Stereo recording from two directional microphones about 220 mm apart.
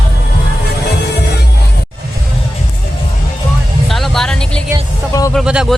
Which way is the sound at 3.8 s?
Centre (ahead or behind).